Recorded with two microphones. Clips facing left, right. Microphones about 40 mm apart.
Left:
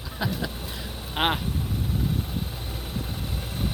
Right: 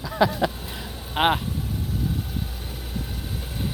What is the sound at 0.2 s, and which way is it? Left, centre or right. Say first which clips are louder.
Speech: right 9 dB; right.